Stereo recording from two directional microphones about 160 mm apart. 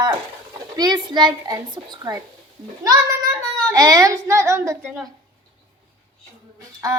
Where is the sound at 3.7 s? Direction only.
20° right (ahead or behind).